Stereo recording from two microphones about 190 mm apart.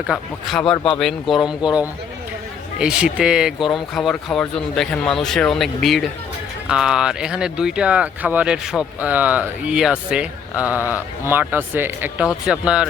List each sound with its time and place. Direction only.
0.1 s speech: centre (ahead or behind)
1.6 s speech: 20° left (ahead or behind)
2.7 s speech: 5° right (ahead or behind)